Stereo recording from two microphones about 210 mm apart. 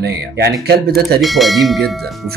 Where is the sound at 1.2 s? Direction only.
Centre (ahead or behind).